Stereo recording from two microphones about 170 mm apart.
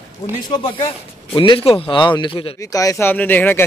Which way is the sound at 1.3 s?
30° left (ahead or behind).